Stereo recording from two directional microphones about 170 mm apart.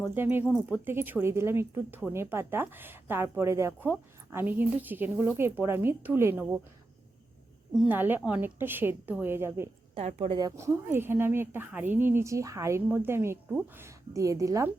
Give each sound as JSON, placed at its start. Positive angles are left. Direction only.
{"t": 0.1, "sound": "speech", "side_deg": -10}
{"t": 7.7, "sound": "speech", "side_deg": -10}
{"t": 10.1, "sound": "speech", "side_deg": -35}
{"t": 10.3, "sound": "a woman's voice", "side_deg": -20}